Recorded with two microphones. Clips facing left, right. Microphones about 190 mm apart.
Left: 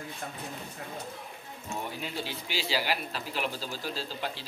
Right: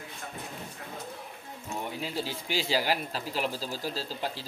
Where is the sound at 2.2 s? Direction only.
45° right (ahead or behind).